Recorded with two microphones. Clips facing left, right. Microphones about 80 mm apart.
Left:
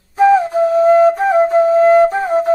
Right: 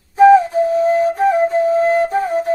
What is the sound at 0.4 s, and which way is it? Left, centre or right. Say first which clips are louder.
Flute: left 2 dB; left.